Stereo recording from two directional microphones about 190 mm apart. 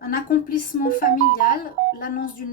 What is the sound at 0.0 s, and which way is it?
Speech, 50° left (ahead or behind).